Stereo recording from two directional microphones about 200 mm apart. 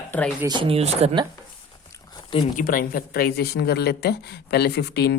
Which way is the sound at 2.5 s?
45° left (ahead or behind).